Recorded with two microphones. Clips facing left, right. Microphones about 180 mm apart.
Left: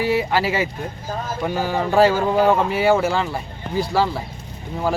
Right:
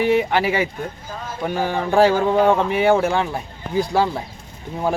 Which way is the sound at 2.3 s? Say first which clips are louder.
Right 1 dB; 5° left (ahead or behind).